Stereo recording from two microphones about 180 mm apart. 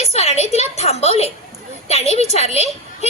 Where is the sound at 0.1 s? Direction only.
35° left (ahead or behind).